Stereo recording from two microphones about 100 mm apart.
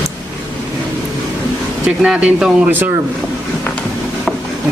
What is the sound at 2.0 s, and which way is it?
Speech, 10° right (ahead or behind).